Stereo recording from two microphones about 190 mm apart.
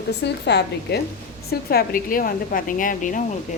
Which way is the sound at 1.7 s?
50° left (ahead or behind).